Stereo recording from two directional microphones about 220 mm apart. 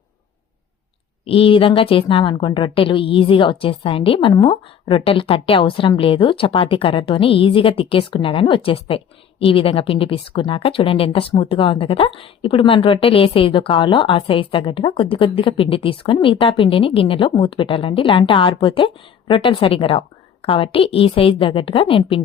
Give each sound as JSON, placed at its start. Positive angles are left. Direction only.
{"t": 1.2, "sound": "a woman's voice", "side_deg": 25}